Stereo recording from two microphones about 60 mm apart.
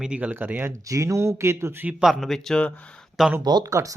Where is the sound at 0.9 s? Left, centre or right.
Right.